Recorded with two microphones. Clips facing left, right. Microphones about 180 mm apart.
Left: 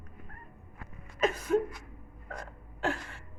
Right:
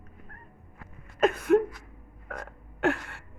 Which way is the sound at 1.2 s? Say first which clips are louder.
Right 6 dB; 60° right (ahead or behind).